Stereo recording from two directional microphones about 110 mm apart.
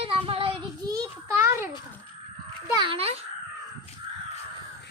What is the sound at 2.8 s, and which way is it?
Speech, 60° right (ahead or behind).